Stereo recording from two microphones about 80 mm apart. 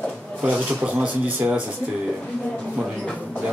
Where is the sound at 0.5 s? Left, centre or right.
Centre.